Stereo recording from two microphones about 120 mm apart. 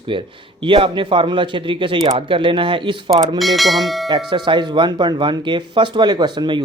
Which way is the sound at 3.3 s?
Centre (ahead or behind).